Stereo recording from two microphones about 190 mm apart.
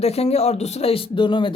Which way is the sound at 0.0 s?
35° left (ahead or behind).